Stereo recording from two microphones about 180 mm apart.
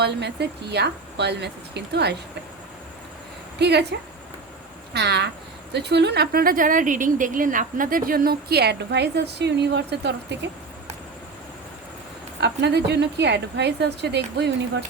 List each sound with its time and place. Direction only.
0.0 s speech: 70° right (ahead or behind)
3.6 s speech: 65° right (ahead or behind)
4.9 s a woman's voice: 70° right (ahead or behind)
12.4 s speech: 70° right (ahead or behind)